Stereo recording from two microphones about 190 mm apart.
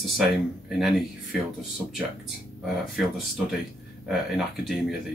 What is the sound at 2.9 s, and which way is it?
Speech, centre (ahead or behind).